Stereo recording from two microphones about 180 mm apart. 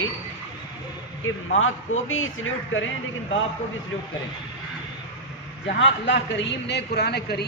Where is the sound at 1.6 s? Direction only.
90° left.